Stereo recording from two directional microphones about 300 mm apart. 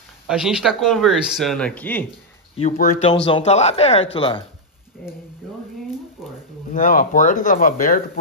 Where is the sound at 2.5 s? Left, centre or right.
Left.